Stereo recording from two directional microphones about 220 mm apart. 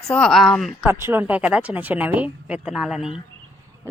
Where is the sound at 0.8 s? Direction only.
10° right (ahead or behind).